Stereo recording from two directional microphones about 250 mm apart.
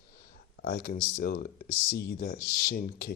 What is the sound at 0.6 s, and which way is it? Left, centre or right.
Speech, left.